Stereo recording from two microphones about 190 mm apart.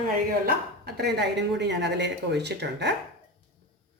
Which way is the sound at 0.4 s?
60° right (ahead or behind).